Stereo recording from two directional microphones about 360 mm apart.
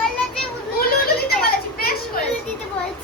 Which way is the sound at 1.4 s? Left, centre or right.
Left.